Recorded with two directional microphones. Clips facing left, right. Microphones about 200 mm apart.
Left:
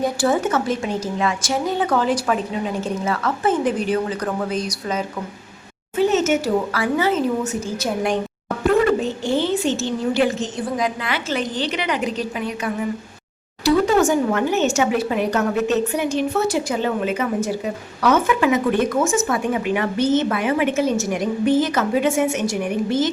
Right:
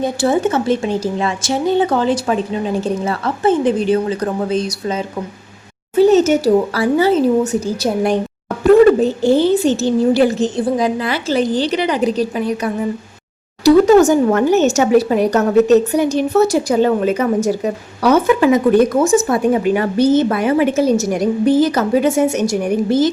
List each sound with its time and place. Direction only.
0.0 s a woman's voice: 25° right (ahead or behind)
6.0 s a woman's voice: 35° right (ahead or behind)
9.0 s speech: 40° right (ahead or behind)